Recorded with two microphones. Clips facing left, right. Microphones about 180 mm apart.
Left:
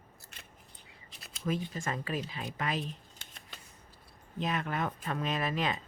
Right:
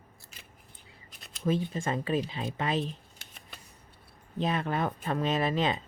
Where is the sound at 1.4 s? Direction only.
30° right (ahead or behind).